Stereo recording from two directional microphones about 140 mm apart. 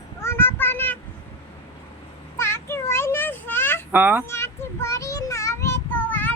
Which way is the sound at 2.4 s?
20° left (ahead or behind).